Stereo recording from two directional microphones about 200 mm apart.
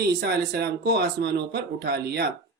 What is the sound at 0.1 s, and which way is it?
Speech, 55° right (ahead or behind).